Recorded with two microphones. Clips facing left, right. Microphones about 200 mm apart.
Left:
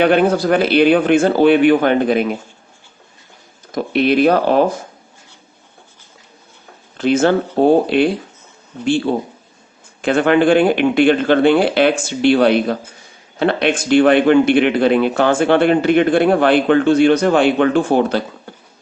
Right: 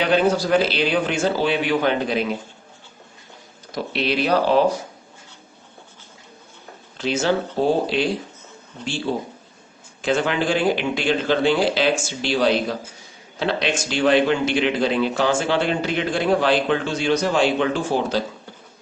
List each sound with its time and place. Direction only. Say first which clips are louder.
0.0 s speech: left 5 dB; 55° left (ahead or behind)
3.7 s speech: left 8 dB; 50° left (ahead or behind)
6.9 s speech: left 7 dB; 55° left (ahead or behind)